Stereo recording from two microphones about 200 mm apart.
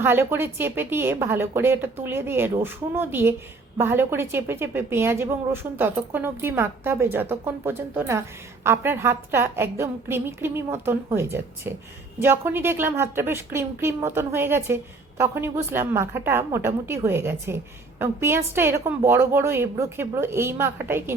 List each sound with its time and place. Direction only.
0.0 s a woman's voice: 10° right (ahead or behind)